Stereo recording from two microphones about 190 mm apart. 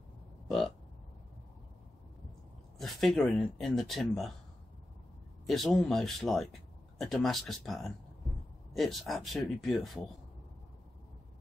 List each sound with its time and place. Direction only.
0.5 s burping: centre (ahead or behind)
2.8 s speech: centre (ahead or behind)
5.5 s speech: centre (ahead or behind)